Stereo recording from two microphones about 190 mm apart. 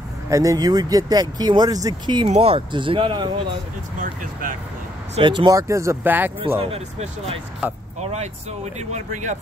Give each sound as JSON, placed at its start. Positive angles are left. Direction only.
{"t": 0.3, "sound": "speech", "side_deg": -15}
{"t": 4.0, "sound": "speech", "side_deg": -45}
{"t": 5.1, "sound": "speech", "side_deg": -25}
{"t": 6.6, "sound": "speech", "side_deg": -30}